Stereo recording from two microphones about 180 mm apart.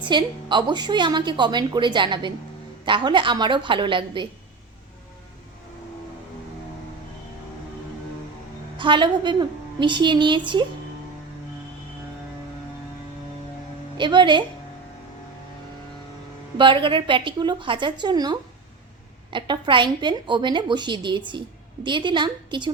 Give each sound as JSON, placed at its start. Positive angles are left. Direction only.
{"t": 0.0, "sound": "a woman's voice", "side_deg": -25}
{"t": 8.8, "sound": "a woman's voice", "side_deg": -25}
{"t": 13.9, "sound": "a woman's voice", "side_deg": -25}
{"t": 16.6, "sound": "a woman's voice", "side_deg": -25}